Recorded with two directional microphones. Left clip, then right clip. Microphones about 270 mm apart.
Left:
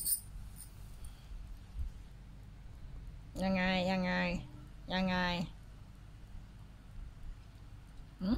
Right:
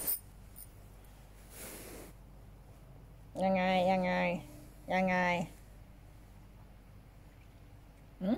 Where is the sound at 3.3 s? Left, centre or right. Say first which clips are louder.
Right 4 dB; centre.